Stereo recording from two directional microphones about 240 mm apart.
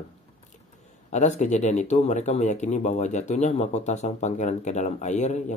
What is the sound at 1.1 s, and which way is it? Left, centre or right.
Speech, left.